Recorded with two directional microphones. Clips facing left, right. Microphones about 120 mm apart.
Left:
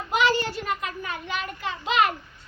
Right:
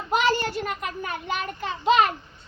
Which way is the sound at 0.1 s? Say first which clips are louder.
Even; 45° right (ahead or behind).